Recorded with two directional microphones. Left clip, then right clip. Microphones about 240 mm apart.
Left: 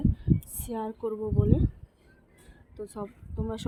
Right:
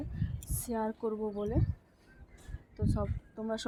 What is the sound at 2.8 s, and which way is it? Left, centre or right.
Speech, centre.